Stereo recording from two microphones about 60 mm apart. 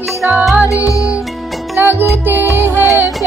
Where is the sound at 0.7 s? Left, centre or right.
Left.